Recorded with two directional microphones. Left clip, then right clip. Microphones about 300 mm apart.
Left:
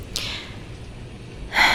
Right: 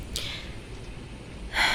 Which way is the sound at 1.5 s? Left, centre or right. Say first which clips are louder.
Left 7 dB; left.